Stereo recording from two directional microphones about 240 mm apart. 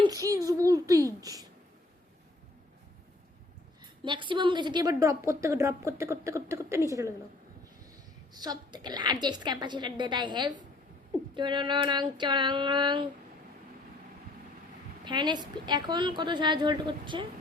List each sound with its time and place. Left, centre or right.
0.0 s a sound: centre
4.0 s a woman's voice: centre
8.3 s a woman's voice: centre
15.0 s a woman's voice: centre